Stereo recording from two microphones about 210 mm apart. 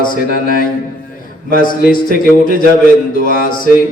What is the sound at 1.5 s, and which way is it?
A man's voice, 40° left (ahead or behind).